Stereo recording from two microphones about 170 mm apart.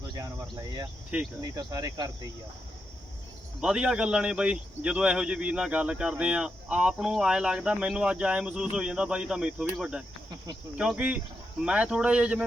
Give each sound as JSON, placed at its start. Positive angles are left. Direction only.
{"t": 0.1, "sound": "cricket", "side_deg": -20}
{"t": 1.4, "sound": "speech", "side_deg": -20}
{"t": 3.6, "sound": "speech", "side_deg": -5}